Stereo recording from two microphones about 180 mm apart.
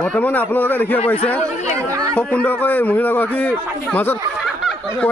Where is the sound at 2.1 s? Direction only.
5° left (ahead or behind).